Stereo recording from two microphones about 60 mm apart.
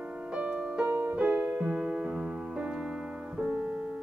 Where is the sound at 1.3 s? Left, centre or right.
Right.